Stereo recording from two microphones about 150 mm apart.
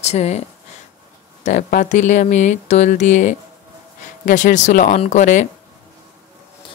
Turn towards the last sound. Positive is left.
turn(degrees=55)  # may be behind; listen again after turning